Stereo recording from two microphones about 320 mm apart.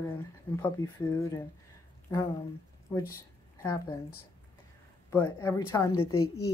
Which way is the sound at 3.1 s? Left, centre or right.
Centre.